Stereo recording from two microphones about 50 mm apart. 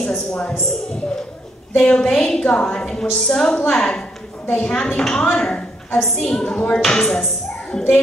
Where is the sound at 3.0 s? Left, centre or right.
Centre.